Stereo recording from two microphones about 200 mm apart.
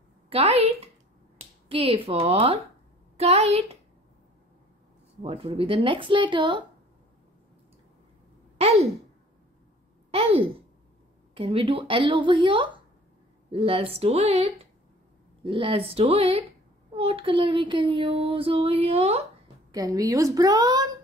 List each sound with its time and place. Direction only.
0.3 s a woman's voice: 30° right (ahead or behind)
5.2 s speech: 30° right (ahead or behind)
8.5 s a woman's voice: 30° right (ahead or behind)
10.1 s speech: 25° right (ahead or behind)
19.7 s a woman's voice: 20° right (ahead or behind)